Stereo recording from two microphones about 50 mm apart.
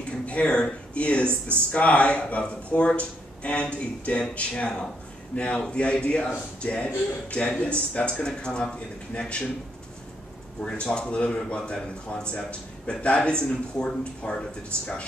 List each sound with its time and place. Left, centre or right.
0.3 s speech: left
10.6 s speech: centre